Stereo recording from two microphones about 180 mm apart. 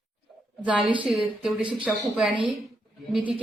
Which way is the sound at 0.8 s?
30° right (ahead or behind).